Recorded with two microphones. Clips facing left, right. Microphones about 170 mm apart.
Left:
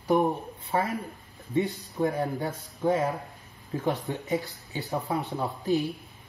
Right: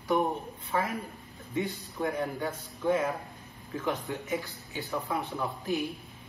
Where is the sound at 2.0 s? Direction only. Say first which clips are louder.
Left 4 dB; 35° left (ahead or behind).